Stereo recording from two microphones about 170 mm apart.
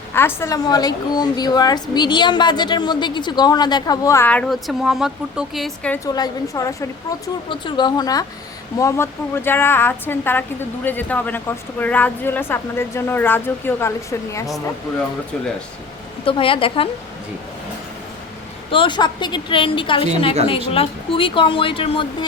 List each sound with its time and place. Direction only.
0.1 s a woman's voice: 15° left (ahead or behind)
6.1 s a woman's voice: 20° left (ahead or behind)
16.2 s speech: 30° left (ahead or behind)
18.7 s a woman's voice: 30° left (ahead or behind)